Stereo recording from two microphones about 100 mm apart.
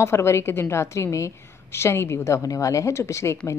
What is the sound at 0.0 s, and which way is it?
A woman's voice, 25° left (ahead or behind).